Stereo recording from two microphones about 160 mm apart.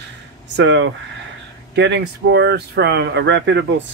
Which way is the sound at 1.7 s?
90° right.